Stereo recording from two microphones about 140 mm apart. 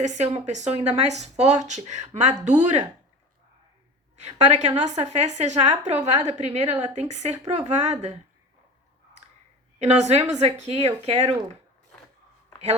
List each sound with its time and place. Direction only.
0.0 s a woman's voice: 55° right (ahead or behind)
4.2 s a woman's voice: 50° right (ahead or behind)
9.7 s speech: 55° right (ahead or behind)